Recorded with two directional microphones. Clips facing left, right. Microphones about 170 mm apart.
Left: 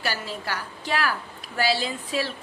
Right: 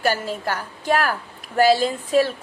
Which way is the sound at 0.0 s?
45° right (ahead or behind).